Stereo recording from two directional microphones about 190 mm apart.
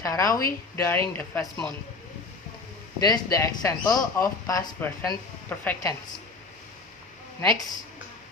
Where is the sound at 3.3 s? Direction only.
15° left (ahead or behind).